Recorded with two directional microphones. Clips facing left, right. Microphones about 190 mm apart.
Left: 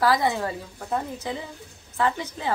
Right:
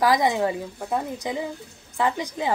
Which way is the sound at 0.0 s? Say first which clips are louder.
Right 2 dB; 15° right (ahead or behind).